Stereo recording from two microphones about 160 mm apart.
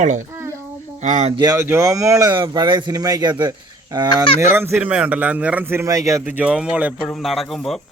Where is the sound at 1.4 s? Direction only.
20° right (ahead or behind).